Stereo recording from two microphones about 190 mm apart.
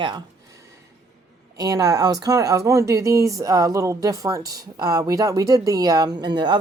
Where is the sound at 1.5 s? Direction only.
20° right (ahead or behind).